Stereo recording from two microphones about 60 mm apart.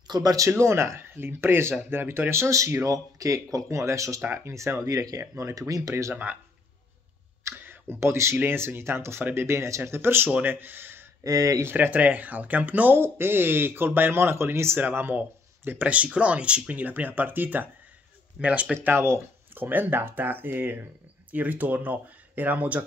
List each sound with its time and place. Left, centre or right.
0.2 s speech: right
0.5 s speech: right
3.7 s speech: right
5.5 s speech: right
7.5 s speech: right
11.2 s speech: right
11.6 s speech: right
14.8 s speech: right
18.9 s speech: right